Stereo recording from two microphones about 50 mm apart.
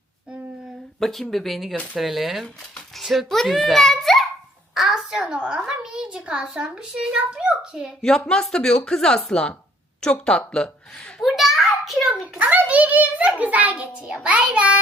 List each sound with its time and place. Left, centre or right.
0.9 s speech: centre
1.7 s speech: left
2.0 s a child's voice: centre
3.5 s a sound: centre
5.1 s a child's voice: centre
8.5 s speech: centre
11.2 s a sound: centre
12.4 s a sound: right
13.4 s a child's voice: right